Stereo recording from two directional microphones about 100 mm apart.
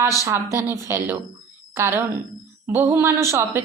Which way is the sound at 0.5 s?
30° right (ahead or behind).